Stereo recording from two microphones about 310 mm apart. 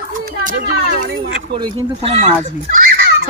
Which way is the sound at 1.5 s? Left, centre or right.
Centre.